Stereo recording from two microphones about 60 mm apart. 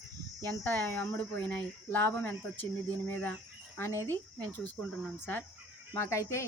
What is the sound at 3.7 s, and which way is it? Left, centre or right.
Speech, left.